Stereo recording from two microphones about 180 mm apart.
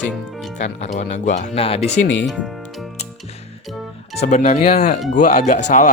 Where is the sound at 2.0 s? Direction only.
90° left.